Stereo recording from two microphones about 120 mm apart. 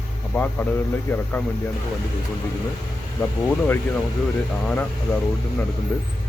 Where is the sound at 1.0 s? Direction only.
20° left (ahead or behind).